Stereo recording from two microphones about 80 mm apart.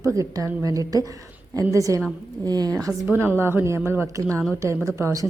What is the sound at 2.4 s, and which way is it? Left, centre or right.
Speech, right.